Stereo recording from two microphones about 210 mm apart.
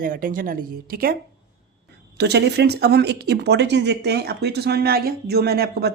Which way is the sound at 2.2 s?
55° right (ahead or behind).